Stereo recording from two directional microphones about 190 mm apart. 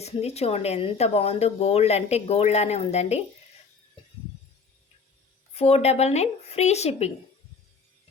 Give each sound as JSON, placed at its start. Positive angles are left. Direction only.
{"t": 0.0, "sound": "speech", "side_deg": 35}
{"t": 5.5, "sound": "speech", "side_deg": 35}